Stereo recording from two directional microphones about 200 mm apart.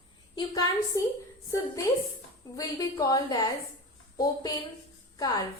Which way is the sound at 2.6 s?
20° left (ahead or behind).